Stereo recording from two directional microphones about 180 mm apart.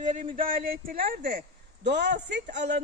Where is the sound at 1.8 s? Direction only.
70° right (ahead or behind).